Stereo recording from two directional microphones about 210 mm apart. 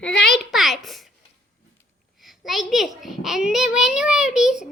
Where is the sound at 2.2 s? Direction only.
Centre (ahead or behind).